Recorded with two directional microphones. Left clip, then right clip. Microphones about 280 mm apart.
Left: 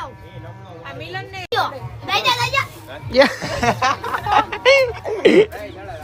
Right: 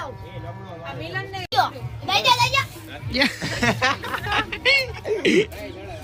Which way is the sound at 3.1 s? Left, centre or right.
Centre.